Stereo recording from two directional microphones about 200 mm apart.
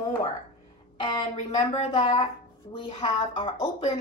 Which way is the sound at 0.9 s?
20° left (ahead or behind).